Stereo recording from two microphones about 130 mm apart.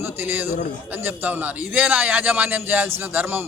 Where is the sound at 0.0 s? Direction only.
15° right (ahead or behind).